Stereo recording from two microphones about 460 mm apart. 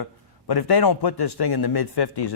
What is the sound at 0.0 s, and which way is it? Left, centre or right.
A man's voice, left.